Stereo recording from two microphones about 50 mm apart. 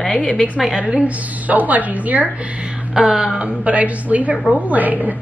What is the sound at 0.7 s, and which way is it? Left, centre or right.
A woman's voice, right.